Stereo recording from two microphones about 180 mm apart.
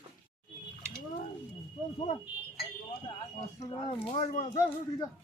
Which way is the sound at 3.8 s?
35° left (ahead or behind).